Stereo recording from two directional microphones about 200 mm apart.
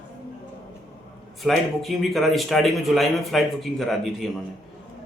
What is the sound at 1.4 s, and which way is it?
Speech, centre (ahead or behind).